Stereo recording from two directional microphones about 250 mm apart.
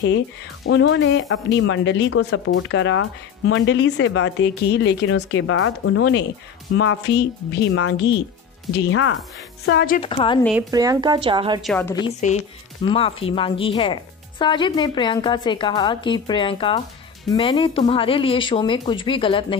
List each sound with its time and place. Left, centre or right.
0.7 s speech: left
9.9 s a woman's voice: left
10.7 s a woman's voice: centre
11.6 s a woman's voice: centre
12.2 s a woman's voice: left